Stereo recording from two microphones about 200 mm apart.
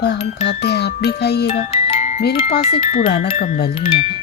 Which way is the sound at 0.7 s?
55° left (ahead or behind).